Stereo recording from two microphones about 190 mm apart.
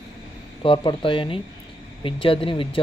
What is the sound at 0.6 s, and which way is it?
Speech, 25° left (ahead or behind).